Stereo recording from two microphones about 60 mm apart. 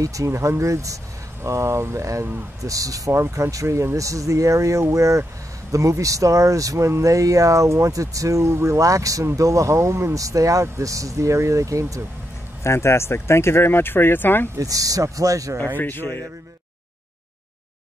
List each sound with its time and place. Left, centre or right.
0.0 s speech: right
2.6 s speech: right
3.1 s speech: right
8.5 s speech: right
10.2 s speech: right
12.6 s speech: left
14.6 s speech: right
15.6 s speech: left